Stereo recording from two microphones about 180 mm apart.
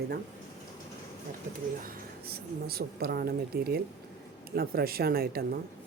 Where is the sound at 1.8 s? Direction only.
60° right (ahead or behind).